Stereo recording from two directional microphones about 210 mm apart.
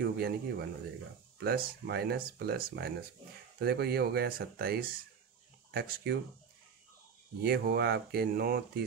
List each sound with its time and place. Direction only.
0.0 s speech: 50° right (ahead or behind)
7.4 s speech: 50° right (ahead or behind)